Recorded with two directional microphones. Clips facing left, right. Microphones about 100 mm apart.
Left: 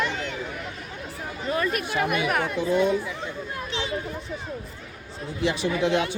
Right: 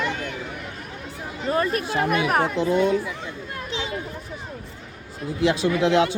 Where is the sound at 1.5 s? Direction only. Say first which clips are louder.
Right 3 dB; 35° right (ahead or behind).